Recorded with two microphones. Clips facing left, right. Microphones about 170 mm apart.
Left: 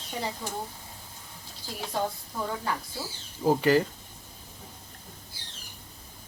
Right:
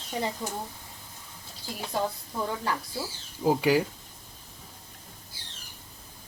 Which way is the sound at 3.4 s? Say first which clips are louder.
Left 1 dB; 10° right (ahead or behind).